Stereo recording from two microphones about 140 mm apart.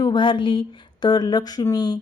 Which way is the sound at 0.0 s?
35° left (ahead or behind).